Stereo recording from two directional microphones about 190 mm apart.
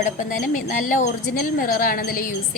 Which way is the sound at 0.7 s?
40° left (ahead or behind).